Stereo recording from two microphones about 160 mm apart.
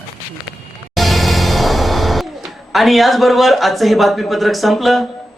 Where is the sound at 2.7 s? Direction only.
Centre (ahead or behind).